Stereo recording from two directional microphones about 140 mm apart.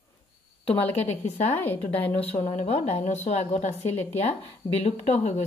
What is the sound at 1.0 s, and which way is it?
Speech, 50° left (ahead or behind).